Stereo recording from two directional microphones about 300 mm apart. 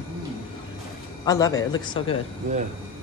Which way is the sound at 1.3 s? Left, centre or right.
Centre.